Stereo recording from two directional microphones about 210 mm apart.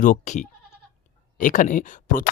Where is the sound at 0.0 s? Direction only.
35° left (ahead or behind).